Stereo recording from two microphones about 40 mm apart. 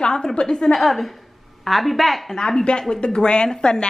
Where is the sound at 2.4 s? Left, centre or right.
Centre.